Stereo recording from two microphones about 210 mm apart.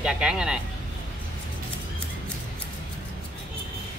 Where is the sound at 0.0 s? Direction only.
5° right (ahead or behind).